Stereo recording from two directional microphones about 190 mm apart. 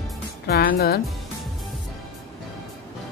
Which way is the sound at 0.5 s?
55° left (ahead or behind).